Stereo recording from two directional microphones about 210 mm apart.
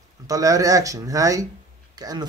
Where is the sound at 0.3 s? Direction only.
15° right (ahead or behind).